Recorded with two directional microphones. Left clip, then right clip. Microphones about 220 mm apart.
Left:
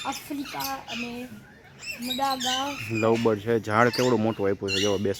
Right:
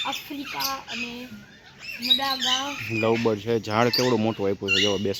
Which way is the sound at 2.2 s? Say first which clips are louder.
Right 1 dB; 40° left (ahead or behind).